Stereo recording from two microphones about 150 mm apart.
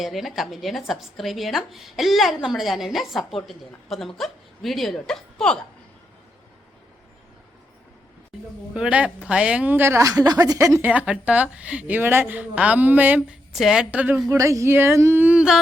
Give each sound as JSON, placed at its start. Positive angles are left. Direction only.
{"t": 0.0, "sound": "speech", "side_deg": 0}
{"t": 8.7, "sound": "speech", "side_deg": -10}
{"t": 14.3, "sound": "speech", "side_deg": -20}